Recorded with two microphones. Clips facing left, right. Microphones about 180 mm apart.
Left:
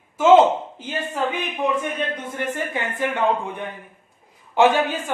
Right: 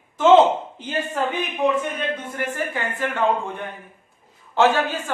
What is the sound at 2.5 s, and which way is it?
Speech, 20° left (ahead or behind).